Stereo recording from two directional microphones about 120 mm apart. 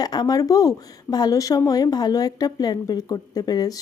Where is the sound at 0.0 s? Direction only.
35° left (ahead or behind).